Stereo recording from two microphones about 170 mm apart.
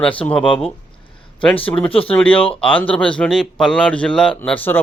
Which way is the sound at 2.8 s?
5° left (ahead or behind).